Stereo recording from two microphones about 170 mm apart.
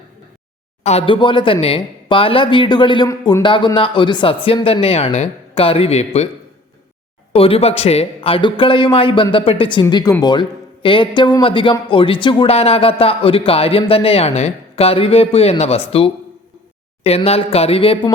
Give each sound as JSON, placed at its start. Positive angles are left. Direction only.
{"t": 0.9, "sound": "speech", "side_deg": 35}
{"t": 7.3, "sound": "speech", "side_deg": 35}